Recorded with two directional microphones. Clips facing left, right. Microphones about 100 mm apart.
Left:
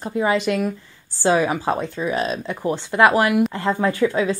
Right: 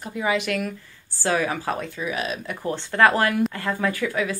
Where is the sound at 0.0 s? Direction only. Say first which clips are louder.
Left 4 dB; 35° left (ahead or behind).